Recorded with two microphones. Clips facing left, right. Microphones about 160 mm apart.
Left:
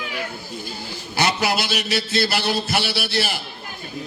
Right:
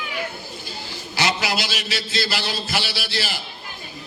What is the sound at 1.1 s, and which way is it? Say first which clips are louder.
A man's voice: left 2 dB; 55° left (ahead or behind).